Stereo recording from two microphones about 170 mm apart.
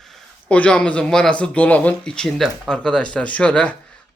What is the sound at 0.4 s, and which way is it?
Speech, 5° left (ahead or behind).